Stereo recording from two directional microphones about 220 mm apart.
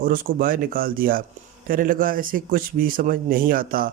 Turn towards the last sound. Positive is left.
turn(degrees=-40)  # may be behind; listen again after turning